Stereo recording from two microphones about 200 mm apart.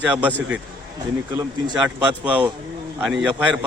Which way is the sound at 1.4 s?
20° right (ahead or behind).